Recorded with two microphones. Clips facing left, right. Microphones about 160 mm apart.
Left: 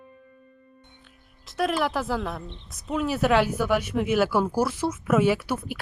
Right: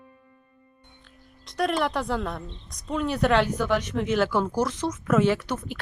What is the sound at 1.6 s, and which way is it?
Speech, centre (ahead or behind).